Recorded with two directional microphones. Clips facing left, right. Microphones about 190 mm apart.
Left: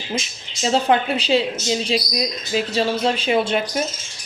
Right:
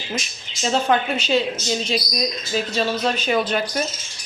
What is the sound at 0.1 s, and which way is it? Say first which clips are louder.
Speech: left 3 dB; 25° left (ahead or behind).